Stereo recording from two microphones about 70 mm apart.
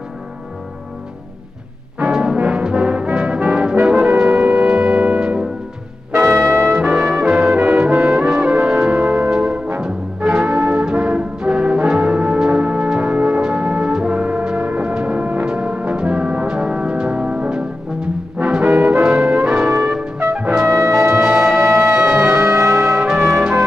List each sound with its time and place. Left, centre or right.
2.0 s brass instrument: centre
4.2 s music: centre
6.1 s music: right
6.5 s brass instrument: right
6.8 s brass instrument: centre
8.4 s music: centre
20.3 s trumpet: centre
20.6 s music: right
21.9 s music: centre
22.2 s music: right
23.0 s trumpet: centre